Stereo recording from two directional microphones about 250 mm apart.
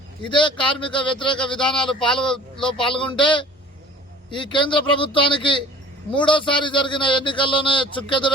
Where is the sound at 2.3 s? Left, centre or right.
Centre.